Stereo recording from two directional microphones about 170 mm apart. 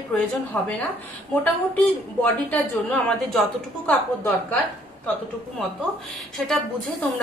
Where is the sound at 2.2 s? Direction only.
10° left (ahead or behind).